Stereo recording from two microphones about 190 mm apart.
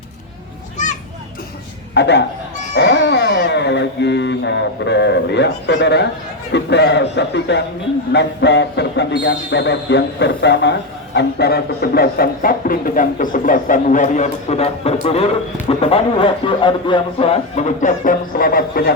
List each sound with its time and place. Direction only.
2.0 s speech: 65° left (ahead or behind)
2.7 s a sound: 70° left (ahead or behind)
6.5 s speech: 65° left (ahead or behind)